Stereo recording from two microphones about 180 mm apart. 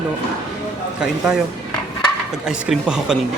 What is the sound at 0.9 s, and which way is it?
Speech, 5° right (ahead or behind).